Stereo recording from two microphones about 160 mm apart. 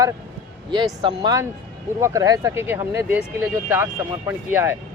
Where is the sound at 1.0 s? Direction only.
30° right (ahead or behind).